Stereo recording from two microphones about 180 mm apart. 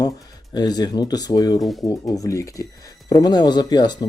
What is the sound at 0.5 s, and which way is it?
A man's voice, 20° left (ahead or behind).